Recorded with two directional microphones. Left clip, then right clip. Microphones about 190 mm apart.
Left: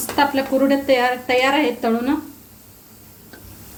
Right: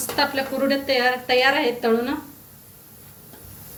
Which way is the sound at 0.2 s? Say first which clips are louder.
Left 5 dB; 45° left (ahead or behind).